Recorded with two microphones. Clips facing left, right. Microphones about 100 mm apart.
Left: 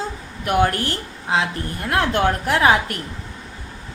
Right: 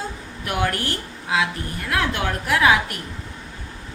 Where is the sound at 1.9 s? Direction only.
35° left (ahead or behind).